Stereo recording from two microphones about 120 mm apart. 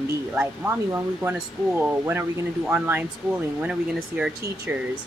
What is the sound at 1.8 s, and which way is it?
Speech, 20° right (ahead or behind).